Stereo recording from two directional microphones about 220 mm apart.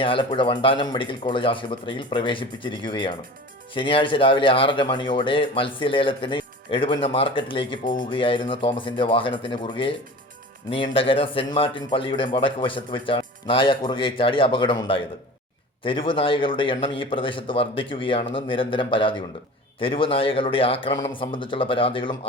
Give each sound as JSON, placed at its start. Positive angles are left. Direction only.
{"t": 0.0, "sound": "a man's voice", "side_deg": 25}